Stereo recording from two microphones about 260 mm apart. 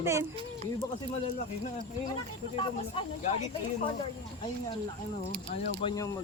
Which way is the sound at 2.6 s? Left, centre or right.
Left.